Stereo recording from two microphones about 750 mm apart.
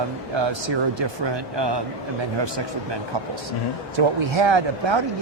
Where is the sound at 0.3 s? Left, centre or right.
Right.